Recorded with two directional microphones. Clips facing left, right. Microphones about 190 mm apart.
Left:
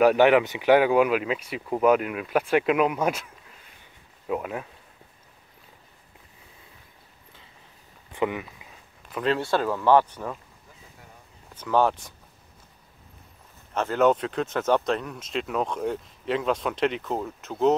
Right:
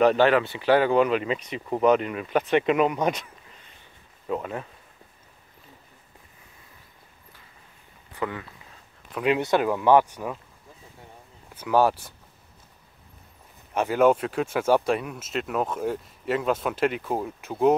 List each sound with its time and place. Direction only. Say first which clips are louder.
0.0 s speech: left 1 dB; 15° left (ahead or behind)
8.1 s speech: left 4 dB; 20° left (ahead or behind)
9.2 s speech: right 2 dB; 15° right (ahead or behind)
11.5 s speech: right 1 dB; 10° right (ahead or behind)
13.7 s speech: right 1 dB; 10° right (ahead or behind)